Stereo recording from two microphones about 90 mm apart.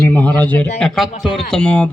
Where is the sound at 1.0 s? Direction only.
5° right (ahead or behind).